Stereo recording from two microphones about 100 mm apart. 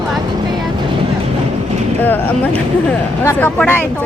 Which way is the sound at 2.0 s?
20° left (ahead or behind).